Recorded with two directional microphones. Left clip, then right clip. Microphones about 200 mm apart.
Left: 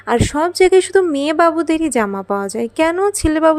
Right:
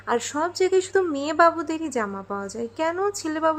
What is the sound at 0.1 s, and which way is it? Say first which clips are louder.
Speech: left 8 dB; 35° left (ahead or behind).